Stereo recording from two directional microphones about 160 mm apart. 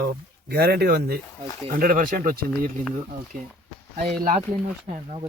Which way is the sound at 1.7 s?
60° right (ahead or behind).